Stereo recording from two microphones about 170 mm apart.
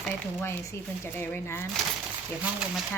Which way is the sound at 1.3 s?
15° left (ahead or behind).